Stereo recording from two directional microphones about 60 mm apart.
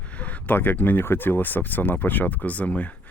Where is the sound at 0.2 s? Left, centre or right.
Left.